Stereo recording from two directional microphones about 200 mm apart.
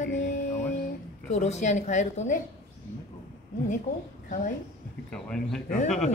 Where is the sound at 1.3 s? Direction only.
35° left (ahead or behind).